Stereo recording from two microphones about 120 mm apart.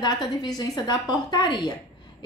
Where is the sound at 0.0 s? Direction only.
35° left (ahead or behind).